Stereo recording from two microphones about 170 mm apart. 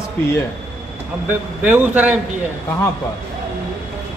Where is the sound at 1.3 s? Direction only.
10° right (ahead or behind).